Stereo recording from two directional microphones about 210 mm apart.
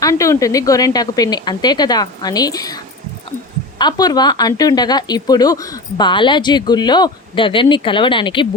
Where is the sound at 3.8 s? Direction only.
20° left (ahead or behind).